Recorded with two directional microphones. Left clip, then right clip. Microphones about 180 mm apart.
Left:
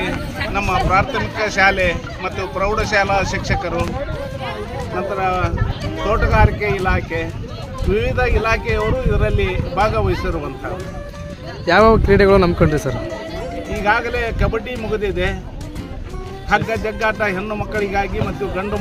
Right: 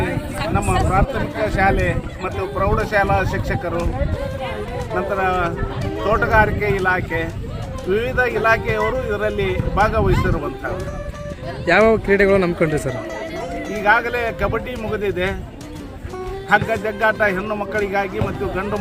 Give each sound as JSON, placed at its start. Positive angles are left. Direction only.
{"t": 0.5, "sound": "speech", "side_deg": 5}
{"t": 4.9, "sound": "speech", "side_deg": 0}
{"t": 11.6, "sound": "speech", "side_deg": 20}
{"t": 13.7, "sound": "speech", "side_deg": 0}
{"t": 16.5, "sound": "speech", "side_deg": 5}